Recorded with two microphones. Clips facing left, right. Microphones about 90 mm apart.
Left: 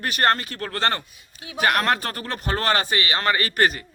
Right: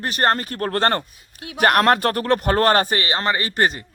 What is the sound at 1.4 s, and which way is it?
Speech, 60° right (ahead or behind).